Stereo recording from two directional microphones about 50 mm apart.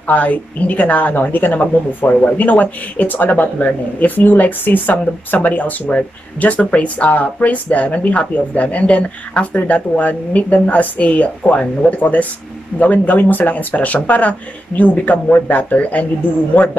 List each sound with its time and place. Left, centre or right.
0.0 s speech: left